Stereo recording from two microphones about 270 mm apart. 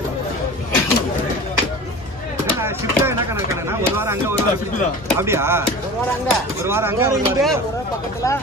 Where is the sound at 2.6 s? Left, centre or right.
Centre.